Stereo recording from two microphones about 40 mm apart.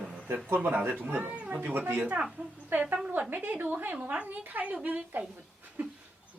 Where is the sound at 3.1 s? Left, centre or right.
Right.